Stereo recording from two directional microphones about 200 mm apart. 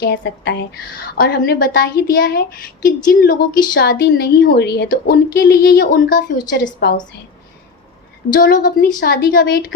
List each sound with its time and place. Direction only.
0.0 s a woman's voice: 60° left (ahead or behind); by 7.0 s 40° left (ahead or behind)
8.3 s a woman's voice: 45° left (ahead or behind)